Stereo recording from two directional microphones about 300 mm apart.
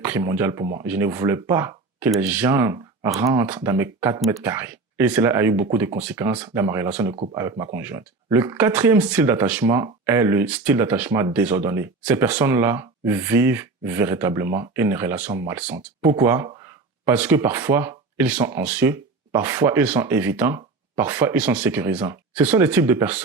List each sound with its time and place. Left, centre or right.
0.0 s speech: centre
0.6 s speech: right
0.9 s speech: centre